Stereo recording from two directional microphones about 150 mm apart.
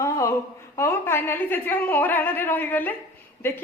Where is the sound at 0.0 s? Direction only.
20° left (ahead or behind).